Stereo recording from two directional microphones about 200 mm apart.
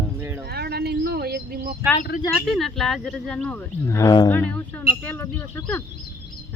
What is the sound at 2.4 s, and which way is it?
Speech, centre (ahead or behind).